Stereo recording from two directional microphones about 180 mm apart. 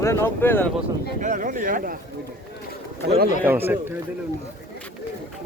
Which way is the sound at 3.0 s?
65° right (ahead or behind).